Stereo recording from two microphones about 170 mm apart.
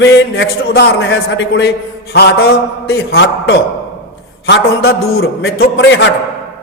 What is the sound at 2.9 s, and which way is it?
A man's voice, 80° left.